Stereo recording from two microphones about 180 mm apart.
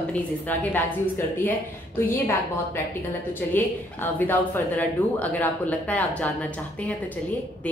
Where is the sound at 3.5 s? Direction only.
10° left (ahead or behind).